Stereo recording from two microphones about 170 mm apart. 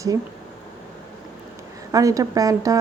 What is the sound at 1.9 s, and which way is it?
Speech, 20° right (ahead or behind).